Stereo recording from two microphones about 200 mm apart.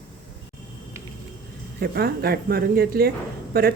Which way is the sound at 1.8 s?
50° right (ahead or behind).